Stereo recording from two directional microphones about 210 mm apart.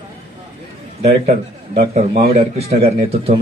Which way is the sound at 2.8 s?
30° right (ahead or behind).